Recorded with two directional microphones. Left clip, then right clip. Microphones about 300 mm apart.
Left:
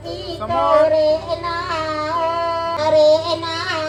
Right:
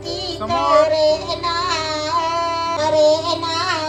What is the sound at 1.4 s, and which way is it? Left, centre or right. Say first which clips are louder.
Music: right 2 dB; right.